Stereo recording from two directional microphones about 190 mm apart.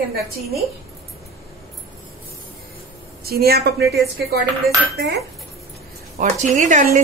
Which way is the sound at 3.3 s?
55° right (ahead or behind).